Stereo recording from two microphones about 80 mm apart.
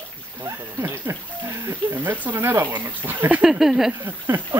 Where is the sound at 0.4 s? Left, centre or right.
Right.